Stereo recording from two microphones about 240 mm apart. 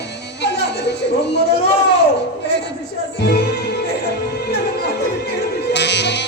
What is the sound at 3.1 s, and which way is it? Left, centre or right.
Music, left.